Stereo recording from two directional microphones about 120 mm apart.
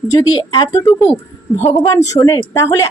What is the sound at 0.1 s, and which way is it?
Speech, 30° left (ahead or behind).